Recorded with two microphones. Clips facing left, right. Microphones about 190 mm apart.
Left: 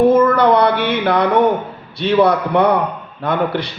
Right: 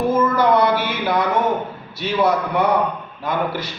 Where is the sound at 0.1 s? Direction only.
60° left (ahead or behind).